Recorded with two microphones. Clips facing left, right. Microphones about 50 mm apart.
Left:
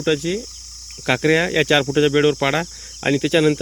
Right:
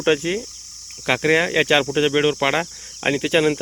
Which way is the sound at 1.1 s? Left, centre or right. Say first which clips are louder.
Left 1 dB; centre.